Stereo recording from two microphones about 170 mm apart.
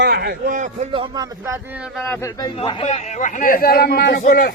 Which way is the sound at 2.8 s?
45° left (ahead or behind).